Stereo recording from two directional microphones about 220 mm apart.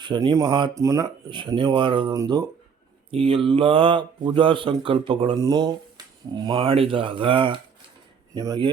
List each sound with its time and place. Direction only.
0.0 s speech: 20° right (ahead or behind)
8.3 s cutlery: 15° right (ahead or behind)